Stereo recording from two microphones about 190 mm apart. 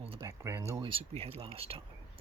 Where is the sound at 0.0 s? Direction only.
30° right (ahead or behind).